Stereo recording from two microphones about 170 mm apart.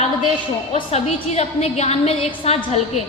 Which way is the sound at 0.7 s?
40° left (ahead or behind).